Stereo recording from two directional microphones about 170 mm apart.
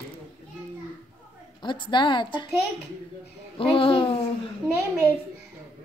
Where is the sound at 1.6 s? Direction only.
25° left (ahead or behind).